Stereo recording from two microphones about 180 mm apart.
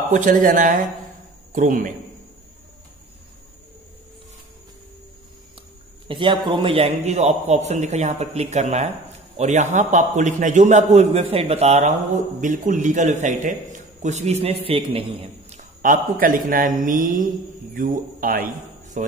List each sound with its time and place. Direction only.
0.1 s a man's voice: 45° right (ahead or behind)
6.0 s a man's voice: 25° right (ahead or behind)
15.8 s a man's voice: 45° right (ahead or behind)